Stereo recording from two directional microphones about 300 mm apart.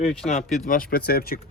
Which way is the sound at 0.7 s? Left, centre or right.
Left.